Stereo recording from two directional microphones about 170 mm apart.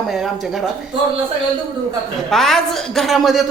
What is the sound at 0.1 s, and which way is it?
Speech, centre (ahead or behind).